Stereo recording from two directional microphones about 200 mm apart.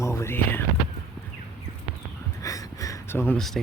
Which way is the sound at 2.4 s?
15° left (ahead or behind).